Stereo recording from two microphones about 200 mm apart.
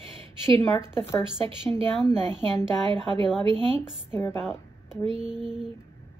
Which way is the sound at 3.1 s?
25° right (ahead or behind).